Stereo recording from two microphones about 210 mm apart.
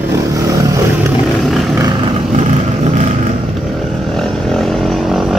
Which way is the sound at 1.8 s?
25° right (ahead or behind).